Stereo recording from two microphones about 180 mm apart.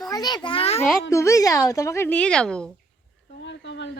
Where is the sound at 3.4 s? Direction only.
75° left (ahead or behind).